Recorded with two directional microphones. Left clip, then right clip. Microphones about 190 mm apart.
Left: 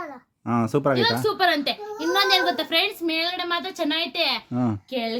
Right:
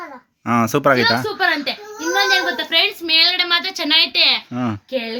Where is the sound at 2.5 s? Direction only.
60° left (ahead or behind).